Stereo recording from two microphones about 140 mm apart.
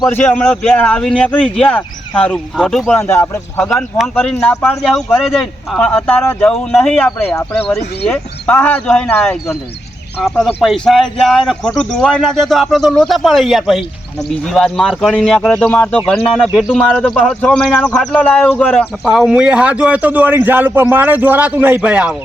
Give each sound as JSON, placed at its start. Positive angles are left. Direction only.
{"t": 0.1, "sound": "a man's voice", "side_deg": 10}
{"t": 2.8, "sound": "speech", "side_deg": 15}
{"t": 3.7, "sound": "a man's voice", "side_deg": 0}
{"t": 16.7, "sound": "speech", "side_deg": 5}